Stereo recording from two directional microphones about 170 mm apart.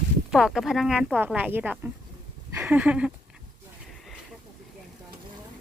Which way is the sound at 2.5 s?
15° right (ahead or behind).